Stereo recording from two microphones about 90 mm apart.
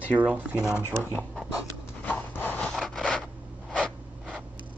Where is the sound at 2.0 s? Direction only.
20° left (ahead or behind).